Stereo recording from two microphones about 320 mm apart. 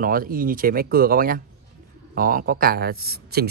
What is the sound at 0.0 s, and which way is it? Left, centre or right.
Speech, right.